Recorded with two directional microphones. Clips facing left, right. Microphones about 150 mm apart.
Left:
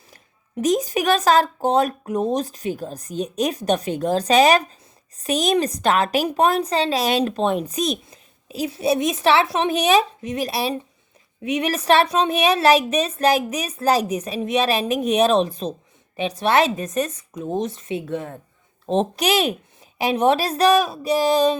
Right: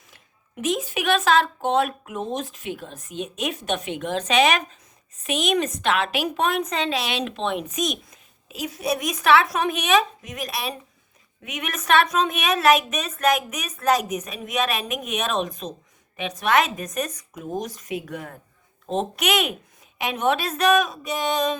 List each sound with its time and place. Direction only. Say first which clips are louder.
0.6 s a woman's voice: left 5 dB; 40° left (ahead or behind)